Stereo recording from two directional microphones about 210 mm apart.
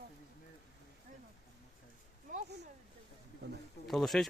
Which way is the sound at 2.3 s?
40° right (ahead or behind).